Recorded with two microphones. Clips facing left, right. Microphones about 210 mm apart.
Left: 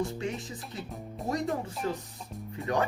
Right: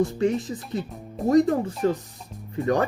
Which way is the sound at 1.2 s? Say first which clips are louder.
Right 11 dB; centre (ahead or behind).